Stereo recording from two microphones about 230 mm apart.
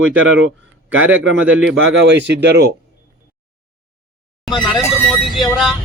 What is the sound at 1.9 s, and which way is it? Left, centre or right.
Speech, right.